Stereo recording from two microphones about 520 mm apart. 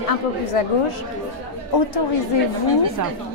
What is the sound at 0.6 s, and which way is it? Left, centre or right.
Speech, left.